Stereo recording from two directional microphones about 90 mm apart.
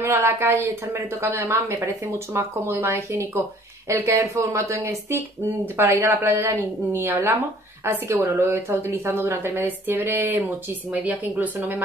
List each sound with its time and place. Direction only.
0.0 s speech: 30° right (ahead or behind)
9.6 s speech: 20° right (ahead or behind)